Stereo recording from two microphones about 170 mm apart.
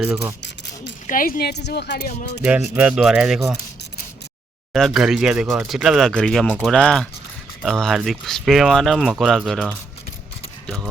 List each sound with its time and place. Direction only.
0.0 s speech: 10° right (ahead or behind)
1.0 s speech: 55° left (ahead or behind); by 2.3 s 80° left
2.4 s speech: 10° right (ahead or behind)
4.7 s speech: centre (ahead or behind)